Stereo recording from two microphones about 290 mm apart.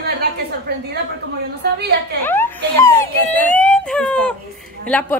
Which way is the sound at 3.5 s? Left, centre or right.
Centre.